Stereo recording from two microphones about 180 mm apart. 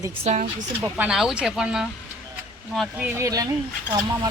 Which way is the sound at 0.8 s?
5° right (ahead or behind).